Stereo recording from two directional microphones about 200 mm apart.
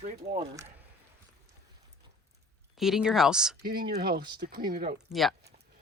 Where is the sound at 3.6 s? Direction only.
50° right (ahead or behind).